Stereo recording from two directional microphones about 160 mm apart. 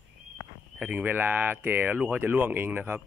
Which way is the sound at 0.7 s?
10° right (ahead or behind).